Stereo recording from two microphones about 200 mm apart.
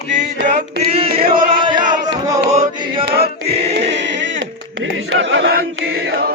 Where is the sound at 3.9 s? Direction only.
60° right (ahead or behind).